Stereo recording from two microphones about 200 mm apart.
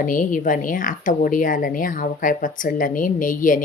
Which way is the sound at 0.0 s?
40° left (ahead or behind).